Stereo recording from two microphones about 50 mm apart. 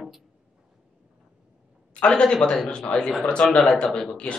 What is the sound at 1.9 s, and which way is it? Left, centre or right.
A man's voice, centre.